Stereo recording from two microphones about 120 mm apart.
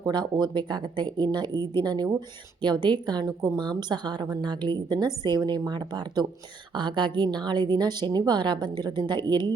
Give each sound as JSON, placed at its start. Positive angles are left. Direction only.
{"t": 0.0, "sound": "a woman's voice", "side_deg": -35}